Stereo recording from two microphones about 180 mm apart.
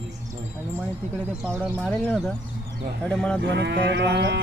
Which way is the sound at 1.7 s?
5° left (ahead or behind).